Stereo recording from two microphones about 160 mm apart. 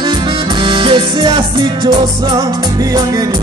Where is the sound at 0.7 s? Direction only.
30° right (ahead or behind).